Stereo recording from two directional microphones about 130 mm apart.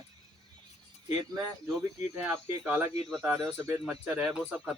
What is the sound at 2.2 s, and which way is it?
Speech, 10° right (ahead or behind).